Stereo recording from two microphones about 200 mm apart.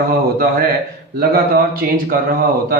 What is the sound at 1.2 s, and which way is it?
A man's voice, 50° right (ahead or behind).